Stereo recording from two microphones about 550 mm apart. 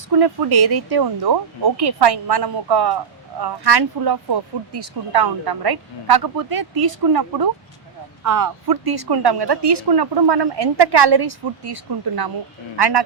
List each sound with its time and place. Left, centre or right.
0.2 s speech: right